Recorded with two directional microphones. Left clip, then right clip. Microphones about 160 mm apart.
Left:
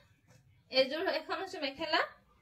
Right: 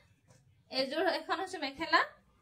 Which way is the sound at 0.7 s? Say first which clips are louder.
Left 1 dB; 55° right (ahead or behind).